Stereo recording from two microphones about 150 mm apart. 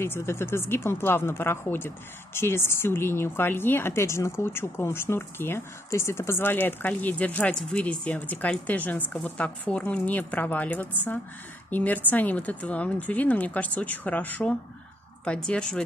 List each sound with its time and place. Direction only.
0.0 s speech: 15° left (ahead or behind)